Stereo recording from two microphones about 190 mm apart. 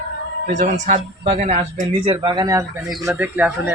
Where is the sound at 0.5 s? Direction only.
40° right (ahead or behind); by 2.7 s 20° right (ahead or behind).